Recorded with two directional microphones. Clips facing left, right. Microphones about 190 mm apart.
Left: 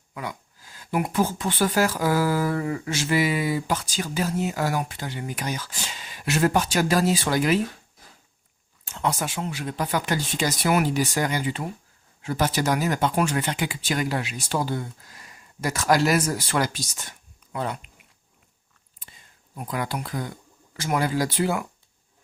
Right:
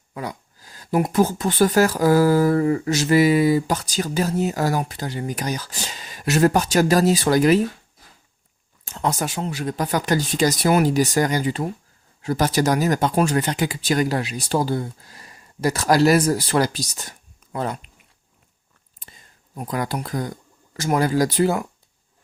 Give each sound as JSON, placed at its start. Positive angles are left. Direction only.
{"t": 0.1, "sound": "speech", "side_deg": -35}
{"t": 8.8, "sound": "speech", "side_deg": -40}
{"t": 19.5, "sound": "speech", "side_deg": -40}